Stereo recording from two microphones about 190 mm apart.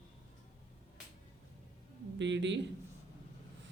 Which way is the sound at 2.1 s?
70° right (ahead or behind).